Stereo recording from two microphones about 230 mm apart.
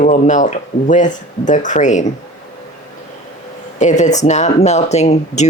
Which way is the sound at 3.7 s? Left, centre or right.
Left.